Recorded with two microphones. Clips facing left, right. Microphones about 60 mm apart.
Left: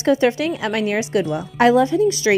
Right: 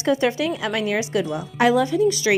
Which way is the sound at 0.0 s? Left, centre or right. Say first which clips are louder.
Left 3 dB; left.